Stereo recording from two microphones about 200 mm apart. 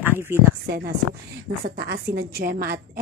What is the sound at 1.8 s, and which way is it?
A woman's voice, 50° right (ahead or behind).